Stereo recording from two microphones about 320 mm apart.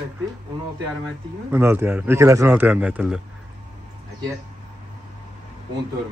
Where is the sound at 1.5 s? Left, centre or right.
Centre.